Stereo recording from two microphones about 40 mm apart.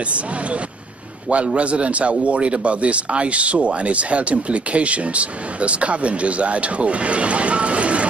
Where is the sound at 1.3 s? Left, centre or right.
Right.